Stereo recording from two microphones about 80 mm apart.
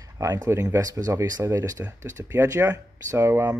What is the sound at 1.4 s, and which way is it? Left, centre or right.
Speech, right.